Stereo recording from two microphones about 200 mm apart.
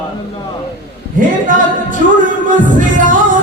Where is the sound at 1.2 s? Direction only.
40° right (ahead or behind).